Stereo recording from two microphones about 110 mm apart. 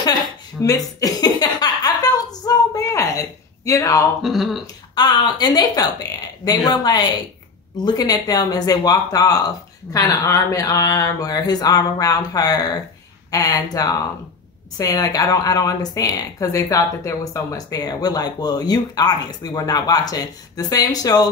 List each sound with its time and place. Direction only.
0.6 s speech: 25° left (ahead or behind)
1.0 s a sound: 35° left (ahead or behind)
4.2 s speech: centre (ahead or behind)
4.9 s a woman's voice: 40° left (ahead or behind)